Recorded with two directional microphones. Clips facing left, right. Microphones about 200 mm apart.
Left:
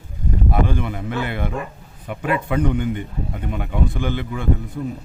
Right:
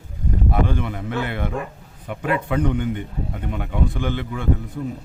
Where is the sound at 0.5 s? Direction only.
10° left (ahead or behind).